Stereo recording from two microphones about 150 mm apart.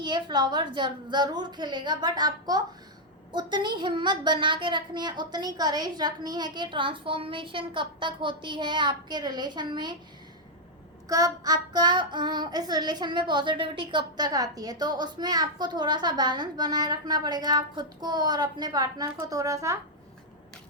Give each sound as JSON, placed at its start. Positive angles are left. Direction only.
{"t": 0.0, "sound": "child singing", "side_deg": -30}
{"t": 3.3, "sound": "a child's voice", "side_deg": -30}
{"t": 11.1, "sound": "child singing", "side_deg": -25}